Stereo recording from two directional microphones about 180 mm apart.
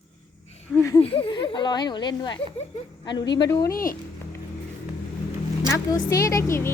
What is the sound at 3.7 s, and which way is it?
Speech, 55° left (ahead or behind).